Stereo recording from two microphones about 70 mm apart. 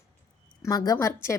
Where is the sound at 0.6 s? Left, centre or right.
Left.